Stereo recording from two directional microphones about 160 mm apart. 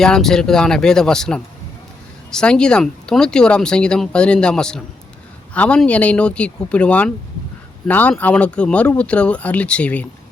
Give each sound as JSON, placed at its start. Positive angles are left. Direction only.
{"t": 0.0, "sound": "speech", "side_deg": 5}